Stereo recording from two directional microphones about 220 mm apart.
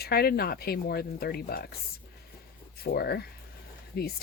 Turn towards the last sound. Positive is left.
turn(degrees=45)  # may be behind; listen again after turning